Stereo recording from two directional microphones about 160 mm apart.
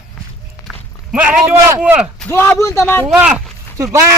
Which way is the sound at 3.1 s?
10° right (ahead or behind).